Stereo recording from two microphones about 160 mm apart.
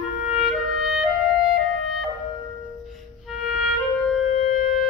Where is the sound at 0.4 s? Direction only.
5° right (ahead or behind).